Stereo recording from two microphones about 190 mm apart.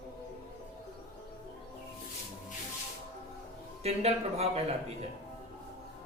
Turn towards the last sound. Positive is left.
turn(degrees=-35)  # may be behind; listen again after turning